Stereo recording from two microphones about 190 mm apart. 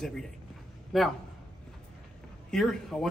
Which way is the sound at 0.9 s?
Centre (ahead or behind).